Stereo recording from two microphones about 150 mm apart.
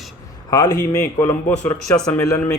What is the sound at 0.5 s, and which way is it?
Speech, 25° left (ahead or behind).